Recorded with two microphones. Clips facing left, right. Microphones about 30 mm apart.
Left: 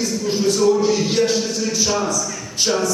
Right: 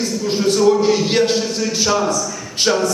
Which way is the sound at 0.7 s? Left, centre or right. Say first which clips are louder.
Right 2 dB; right.